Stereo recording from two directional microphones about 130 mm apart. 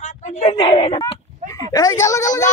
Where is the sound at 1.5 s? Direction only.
25° left (ahead or behind).